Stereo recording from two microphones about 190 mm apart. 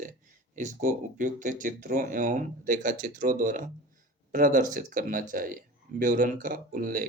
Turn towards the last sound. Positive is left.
turn(degrees=-45)  # may be behind; listen again after turning